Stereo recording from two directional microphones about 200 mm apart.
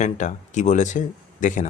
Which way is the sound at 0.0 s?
35° left (ahead or behind).